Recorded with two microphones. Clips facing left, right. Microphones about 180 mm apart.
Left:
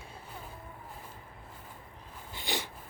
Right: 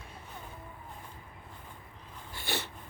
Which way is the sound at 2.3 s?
15° left (ahead or behind).